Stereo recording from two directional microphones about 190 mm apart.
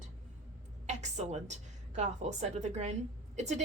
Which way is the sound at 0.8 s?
35° right (ahead or behind).